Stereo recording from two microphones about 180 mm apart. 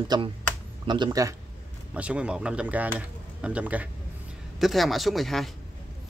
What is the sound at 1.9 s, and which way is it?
Speech, 5° right (ahead or behind).